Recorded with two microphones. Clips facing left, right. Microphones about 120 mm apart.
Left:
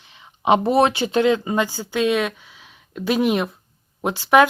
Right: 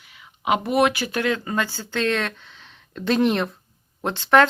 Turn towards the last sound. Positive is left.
turn(degrees=10)  # may be behind; listen again after turning